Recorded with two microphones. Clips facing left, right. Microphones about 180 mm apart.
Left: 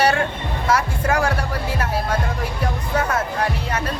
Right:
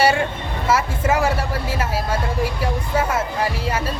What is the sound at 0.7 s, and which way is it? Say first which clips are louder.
Speech: right 1 dB; 5° right (ahead or behind).